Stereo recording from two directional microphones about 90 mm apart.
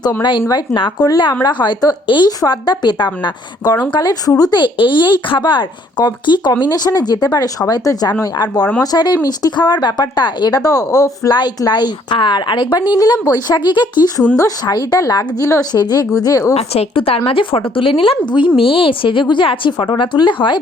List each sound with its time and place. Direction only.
0.2 s a woman's voice: 60° left (ahead or behind)
2.0 s a woman's voice: 60° left (ahead or behind)
2.4 s speech: 50° left (ahead or behind)
11.3 s a woman's voice: 55° left (ahead or behind)
14.3 s speech: 45° left (ahead or behind)
15.7 s speech: 50° left (ahead or behind)
16.9 s a woman's voice: 90° left; by 20.6 s 60° left (ahead or behind)